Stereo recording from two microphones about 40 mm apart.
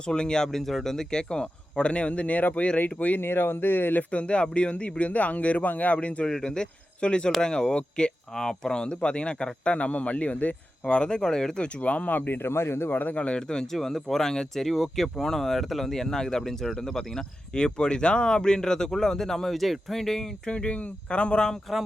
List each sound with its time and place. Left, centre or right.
0.0 s speech: left
3.2 s speech: left
4.1 s speech: left
6.2 s speech: centre; by 12.4 s left
12.4 s a man's voice: left
13.0 s speech: left
13.2 s speech: left
13.6 s speech: centre
16.0 s speech: centre
20.5 s speech: left